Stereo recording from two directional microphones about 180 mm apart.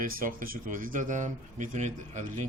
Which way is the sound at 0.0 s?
50° right (ahead or behind).